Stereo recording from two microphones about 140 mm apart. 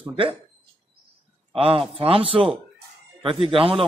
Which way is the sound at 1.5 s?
40° right (ahead or behind).